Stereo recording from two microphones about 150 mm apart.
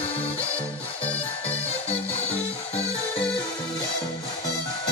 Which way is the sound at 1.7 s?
40° left (ahead or behind).